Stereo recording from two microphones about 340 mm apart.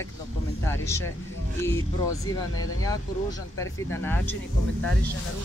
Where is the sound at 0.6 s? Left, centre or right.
Centre.